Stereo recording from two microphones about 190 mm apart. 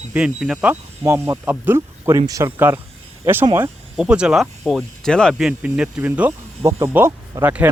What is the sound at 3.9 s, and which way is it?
Speech, 5° right (ahead or behind).